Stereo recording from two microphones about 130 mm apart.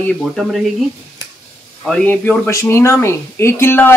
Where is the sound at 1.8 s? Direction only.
5° left (ahead or behind).